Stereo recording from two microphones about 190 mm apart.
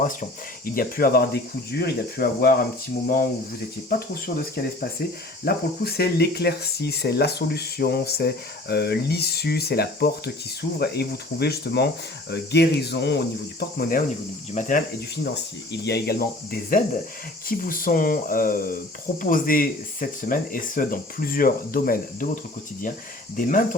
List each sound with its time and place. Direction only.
0.0 s speech: 45° left (ahead or behind)
3.8 s speech: 50° left (ahead or behind)
23.4 s speech: 45° left (ahead or behind)